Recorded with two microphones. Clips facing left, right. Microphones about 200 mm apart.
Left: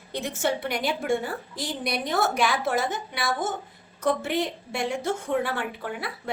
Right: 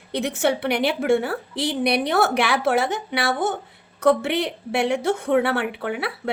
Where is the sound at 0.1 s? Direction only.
70° right (ahead or behind).